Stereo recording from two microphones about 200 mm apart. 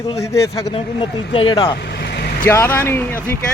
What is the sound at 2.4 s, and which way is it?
Speech, 10° left (ahead or behind).